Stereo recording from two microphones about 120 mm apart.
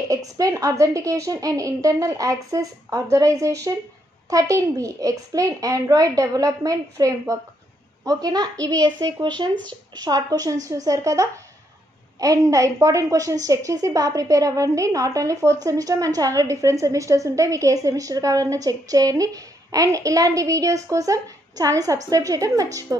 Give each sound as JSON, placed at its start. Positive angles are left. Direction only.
{"t": 0.1, "sound": "a woman's voice", "side_deg": -30}